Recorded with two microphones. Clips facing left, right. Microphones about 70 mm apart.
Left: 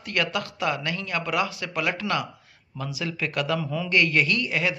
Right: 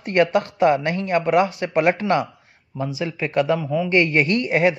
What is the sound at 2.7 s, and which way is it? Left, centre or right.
Speech, right.